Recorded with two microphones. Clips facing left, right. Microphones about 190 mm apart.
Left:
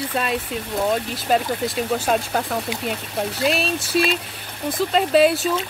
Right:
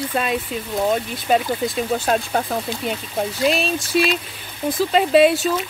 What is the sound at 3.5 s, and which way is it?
Speech, centre (ahead or behind).